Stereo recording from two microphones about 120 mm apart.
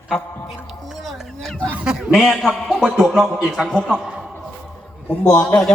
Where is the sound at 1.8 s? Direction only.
5° right (ahead or behind).